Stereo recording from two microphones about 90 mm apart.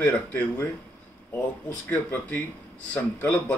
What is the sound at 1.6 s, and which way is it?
Speech, 20° left (ahead or behind).